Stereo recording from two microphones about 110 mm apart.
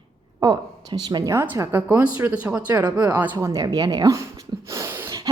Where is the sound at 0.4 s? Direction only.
40° right (ahead or behind).